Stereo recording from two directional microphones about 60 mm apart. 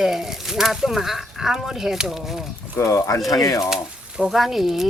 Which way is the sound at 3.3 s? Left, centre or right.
Left.